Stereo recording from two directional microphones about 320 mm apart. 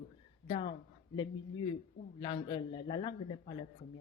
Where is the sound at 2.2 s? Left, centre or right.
Centre.